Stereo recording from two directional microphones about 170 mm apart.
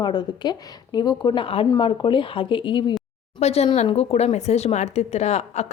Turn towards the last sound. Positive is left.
turn(degrees=40)  # may be behind; listen again after turning